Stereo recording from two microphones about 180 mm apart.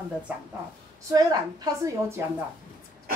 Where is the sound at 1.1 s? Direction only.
20° right (ahead or behind).